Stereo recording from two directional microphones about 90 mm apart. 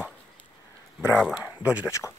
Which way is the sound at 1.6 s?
15° right (ahead or behind).